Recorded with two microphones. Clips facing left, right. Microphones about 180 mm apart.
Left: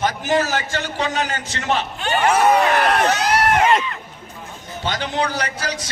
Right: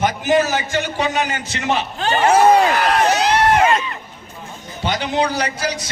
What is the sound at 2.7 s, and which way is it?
Speech, 55° left (ahead or behind).